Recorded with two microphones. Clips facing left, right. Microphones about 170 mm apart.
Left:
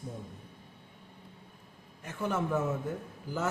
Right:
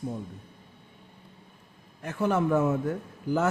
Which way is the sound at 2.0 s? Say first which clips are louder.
Right 7 dB; 65° right (ahead or behind).